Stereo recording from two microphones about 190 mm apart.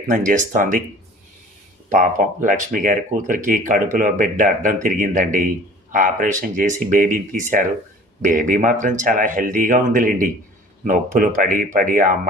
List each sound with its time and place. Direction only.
0.1 s speech: 40° right (ahead or behind)
1.9 s speech: 45° right (ahead or behind)